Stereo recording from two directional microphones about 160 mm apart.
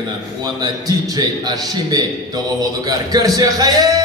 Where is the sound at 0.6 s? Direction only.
25° right (ahead or behind).